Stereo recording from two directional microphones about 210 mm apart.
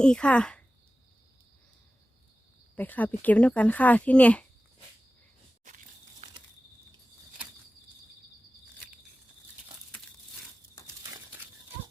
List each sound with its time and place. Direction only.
0.0 s speech: 5° left (ahead or behind)
2.7 s speech: 10° left (ahead or behind)
5.6 s a sound: 35° right (ahead or behind)